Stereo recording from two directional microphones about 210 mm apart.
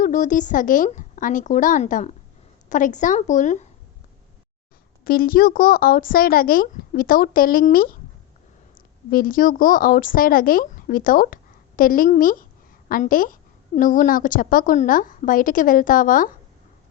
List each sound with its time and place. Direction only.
0.0 s a woman's voice: 35° left (ahead or behind)
5.0 s a woman's voice: 45° left (ahead or behind)
9.0 s a woman's voice: 40° left (ahead or behind)